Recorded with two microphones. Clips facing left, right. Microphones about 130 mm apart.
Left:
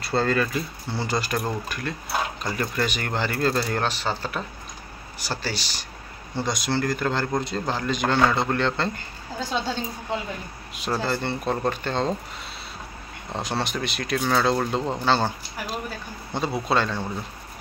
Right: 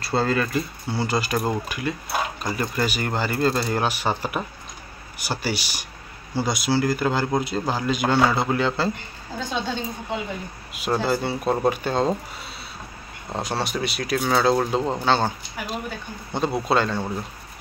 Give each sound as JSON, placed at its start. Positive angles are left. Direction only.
{"t": 0.1, "sound": "speech", "side_deg": -5}
{"t": 10.7, "sound": "speech", "side_deg": -5}
{"t": 13.3, "sound": "speech", "side_deg": 0}